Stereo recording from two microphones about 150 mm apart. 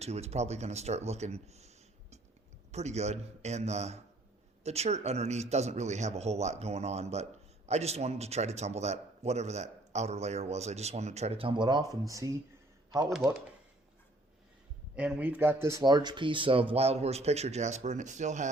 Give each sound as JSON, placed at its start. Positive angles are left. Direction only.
{"t": 0.0, "sound": "a man's voice", "side_deg": -45}
{"t": 14.9, "sound": "speech", "side_deg": -10}